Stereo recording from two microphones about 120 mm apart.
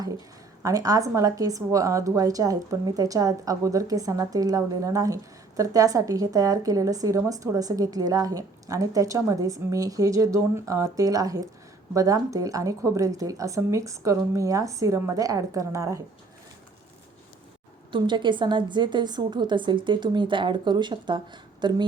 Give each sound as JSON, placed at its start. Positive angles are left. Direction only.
{"t": 0.6, "sound": "a woman's voice", "side_deg": -30}
{"t": 17.9, "sound": "a woman's voice", "side_deg": -40}